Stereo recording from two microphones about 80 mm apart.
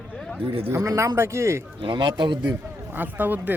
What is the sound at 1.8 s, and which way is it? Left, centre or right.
Speech, right.